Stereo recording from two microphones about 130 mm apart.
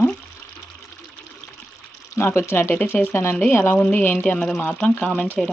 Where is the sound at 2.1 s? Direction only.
20° left (ahead or behind).